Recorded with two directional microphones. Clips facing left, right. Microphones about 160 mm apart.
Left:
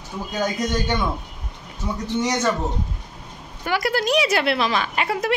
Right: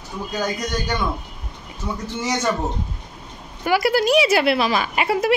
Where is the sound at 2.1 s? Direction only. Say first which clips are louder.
Left 3 dB; 5° right (ahead or behind).